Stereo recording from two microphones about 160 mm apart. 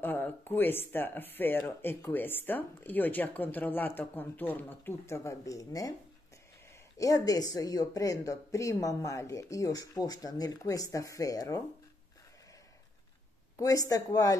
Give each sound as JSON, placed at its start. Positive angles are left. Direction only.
{"t": 0.0, "sound": "speech", "side_deg": 10}
{"t": 7.0, "sound": "speech", "side_deg": 20}
{"t": 13.6, "sound": "speech", "side_deg": 20}